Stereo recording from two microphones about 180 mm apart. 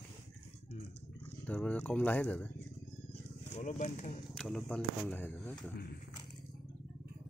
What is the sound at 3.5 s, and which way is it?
Speech, 40° left (ahead or behind).